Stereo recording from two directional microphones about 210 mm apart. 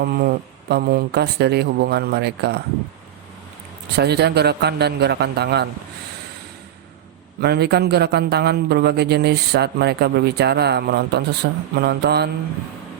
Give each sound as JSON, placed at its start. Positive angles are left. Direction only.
{"t": 0.0, "sound": "a man's voice", "side_deg": -45}
{"t": 3.9, "sound": "a man's voice", "side_deg": -50}
{"t": 7.4, "sound": "a man's voice", "side_deg": -50}